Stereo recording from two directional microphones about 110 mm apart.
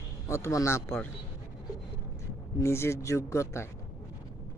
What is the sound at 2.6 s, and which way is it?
Speech, 25° left (ahead or behind).